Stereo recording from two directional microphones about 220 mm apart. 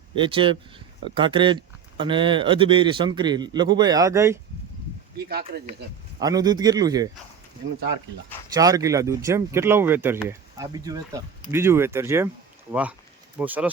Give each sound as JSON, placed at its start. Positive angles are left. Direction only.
{"t": 0.2, "sound": "speech", "side_deg": -25}
{"t": 5.3, "sound": "speech", "side_deg": -45}
{"t": 6.1, "sound": "speech", "side_deg": -15}
{"t": 8.5, "sound": "speech", "side_deg": -15}